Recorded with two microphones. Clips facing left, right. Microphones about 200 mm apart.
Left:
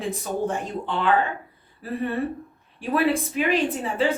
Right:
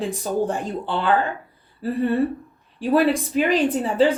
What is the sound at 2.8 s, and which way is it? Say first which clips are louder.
Speech: right 4 dB; 35° right (ahead or behind).